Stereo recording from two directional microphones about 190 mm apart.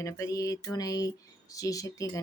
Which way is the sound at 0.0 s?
15° left (ahead or behind).